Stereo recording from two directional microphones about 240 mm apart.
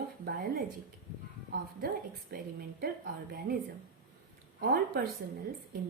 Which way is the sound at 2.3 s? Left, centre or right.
Right.